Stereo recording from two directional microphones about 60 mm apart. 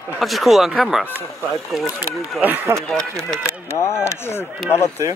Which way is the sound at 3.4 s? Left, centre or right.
Left.